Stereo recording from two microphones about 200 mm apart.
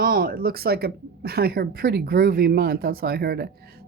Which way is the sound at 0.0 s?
45° right (ahead or behind).